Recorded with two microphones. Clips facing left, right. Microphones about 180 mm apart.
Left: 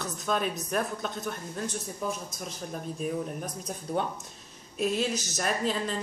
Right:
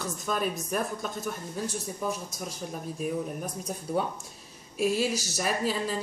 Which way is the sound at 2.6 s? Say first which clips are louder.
Even; 5° right (ahead or behind).